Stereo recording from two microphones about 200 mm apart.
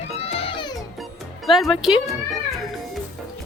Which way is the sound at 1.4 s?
Centre (ahead or behind).